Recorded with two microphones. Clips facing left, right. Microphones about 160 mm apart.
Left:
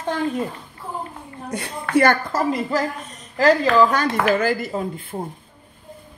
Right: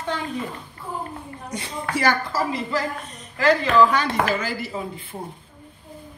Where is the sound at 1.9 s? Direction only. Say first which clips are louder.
Left 5 dB; 55° left (ahead or behind).